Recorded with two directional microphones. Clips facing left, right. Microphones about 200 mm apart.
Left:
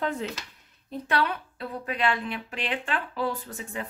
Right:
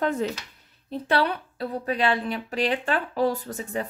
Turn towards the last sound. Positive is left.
turn(degrees=-40)  # may be behind; listen again after turning